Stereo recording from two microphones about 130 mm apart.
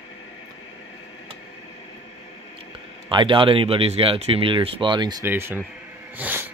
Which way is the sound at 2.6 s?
40° right (ahead or behind).